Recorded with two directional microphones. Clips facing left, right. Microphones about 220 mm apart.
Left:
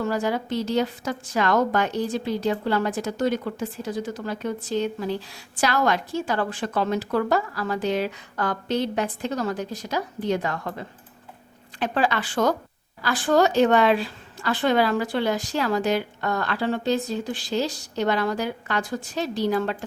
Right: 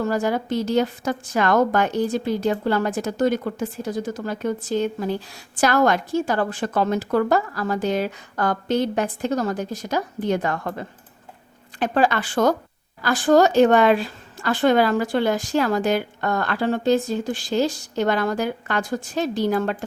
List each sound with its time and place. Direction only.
0.0 s a woman's voice: 45° right (ahead or behind)